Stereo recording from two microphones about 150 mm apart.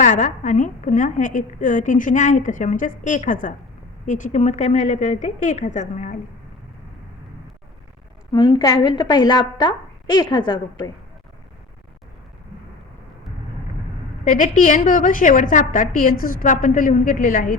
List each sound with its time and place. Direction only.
0.0 s a woman's voice: 55° left (ahead or behind)
8.3 s a woman's voice: 30° left (ahead or behind)
14.3 s a woman's voice: 55° left (ahead or behind)